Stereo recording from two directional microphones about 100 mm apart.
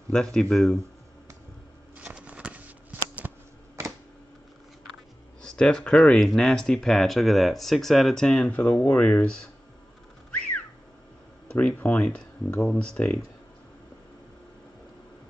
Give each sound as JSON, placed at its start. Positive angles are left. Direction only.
{"t": 0.1, "sound": "speech", "side_deg": 5}
{"t": 2.0, "sound": "shuffling cards", "side_deg": -15}
{"t": 3.2, "sound": "a sound", "side_deg": -20}
{"t": 5.4, "sound": "speech", "side_deg": 5}
{"t": 8.5, "sound": "speech", "side_deg": 15}
{"t": 11.4, "sound": "speech", "side_deg": 15}